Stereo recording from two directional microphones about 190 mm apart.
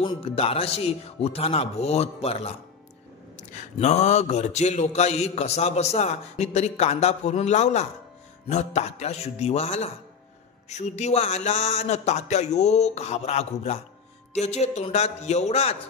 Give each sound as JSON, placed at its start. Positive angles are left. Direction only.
{"t": 0.0, "sound": "a man's voice", "side_deg": 30}